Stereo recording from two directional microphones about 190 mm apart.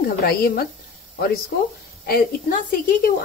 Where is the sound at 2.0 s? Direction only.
50° left (ahead or behind).